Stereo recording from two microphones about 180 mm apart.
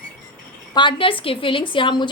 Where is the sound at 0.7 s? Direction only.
25° left (ahead or behind).